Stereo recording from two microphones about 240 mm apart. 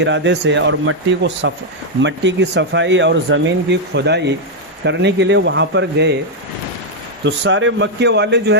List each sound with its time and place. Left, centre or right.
0.0 s speech: right
7.3 s speech: right